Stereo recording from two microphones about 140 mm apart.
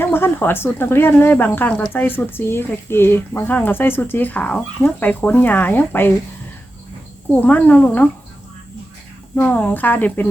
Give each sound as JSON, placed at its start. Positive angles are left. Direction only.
{"t": 0.0, "sound": "speech", "side_deg": 15}
{"t": 7.4, "sound": "speech", "side_deg": 10}
{"t": 9.3, "sound": "speech", "side_deg": 10}